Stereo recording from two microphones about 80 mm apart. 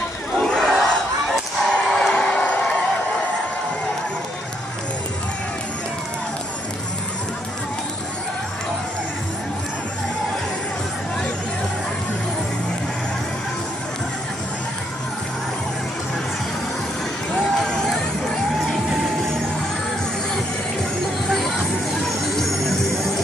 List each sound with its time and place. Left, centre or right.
0.4 s battle cry: centre
1.7 s a sound: centre
17.4 s music: centre
21.3 s vehicle: centre
22.0 s music: centre